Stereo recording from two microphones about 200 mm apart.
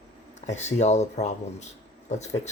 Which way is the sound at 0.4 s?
35° left (ahead or behind).